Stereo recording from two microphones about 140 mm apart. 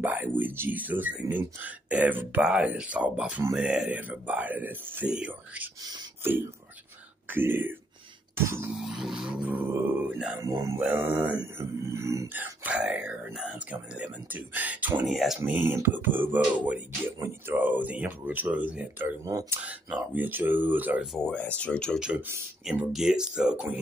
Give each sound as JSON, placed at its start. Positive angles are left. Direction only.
{"t": 0.0, "sound": "a sound", "side_deg": -15}
{"t": 0.4, "sound": "speech", "side_deg": -15}
{"t": 7.2, "sound": "speech", "side_deg": -15}
{"t": 8.7, "sound": "speech", "side_deg": -5}
{"t": 10.4, "sound": "a sound", "side_deg": -20}
{"t": 11.0, "sound": "speech", "side_deg": -15}
{"t": 21.1, "sound": "speech", "side_deg": 5}
{"t": 22.0, "sound": "speech", "side_deg": -10}